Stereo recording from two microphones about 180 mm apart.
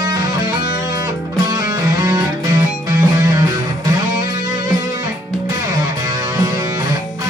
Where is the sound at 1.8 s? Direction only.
15° right (ahead or behind).